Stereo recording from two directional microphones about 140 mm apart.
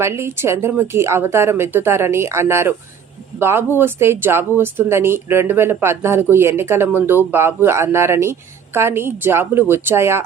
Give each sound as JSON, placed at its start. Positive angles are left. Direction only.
{"t": 0.0, "sound": "speech", "side_deg": -20}